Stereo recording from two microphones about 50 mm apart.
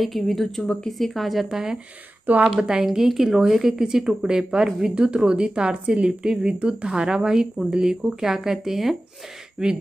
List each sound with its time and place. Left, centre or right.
0.0 s speech: centre
2.3 s speech: right
2.6 s a woman's voice: centre
4.9 s a woman's voice: right